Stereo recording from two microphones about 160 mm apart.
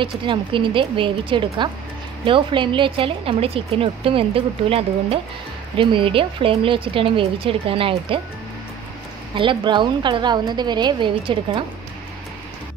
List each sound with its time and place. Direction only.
0.0 s speech: 30° right (ahead or behind)
9.3 s a woman's voice: 30° right (ahead or behind)